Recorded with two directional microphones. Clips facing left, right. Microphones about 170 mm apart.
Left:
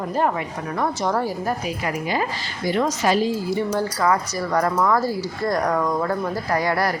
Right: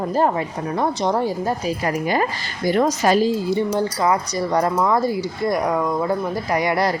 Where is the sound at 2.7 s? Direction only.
45° right (ahead or behind).